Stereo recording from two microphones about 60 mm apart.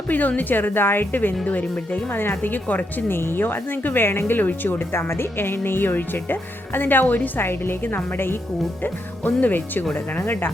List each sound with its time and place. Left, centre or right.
0.1 s speech: left
2.1 s speech: left